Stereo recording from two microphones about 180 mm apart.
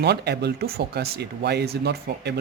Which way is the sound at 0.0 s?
65° right (ahead or behind).